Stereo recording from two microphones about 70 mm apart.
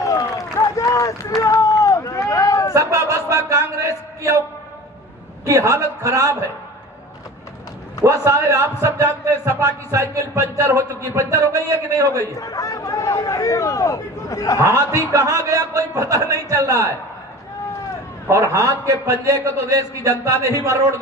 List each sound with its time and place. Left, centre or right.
0.0 s run: left
2.7 s a sound: right
5.5 s a man's voice: right
8.0 s a man's voice: right
12.4 s speech: left
14.6 s a man's voice: right
18.3 s a man's voice: right